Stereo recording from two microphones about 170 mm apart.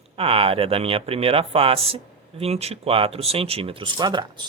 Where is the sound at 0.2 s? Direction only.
35° right (ahead or behind).